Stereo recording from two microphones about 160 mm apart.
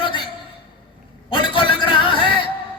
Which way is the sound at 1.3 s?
30° left (ahead or behind).